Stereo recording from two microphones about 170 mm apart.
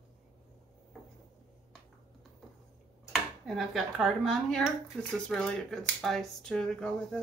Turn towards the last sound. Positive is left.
turn(degrees=5)  # may be behind; listen again after turning